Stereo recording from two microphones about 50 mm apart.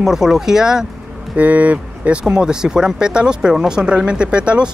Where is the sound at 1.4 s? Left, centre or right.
Right.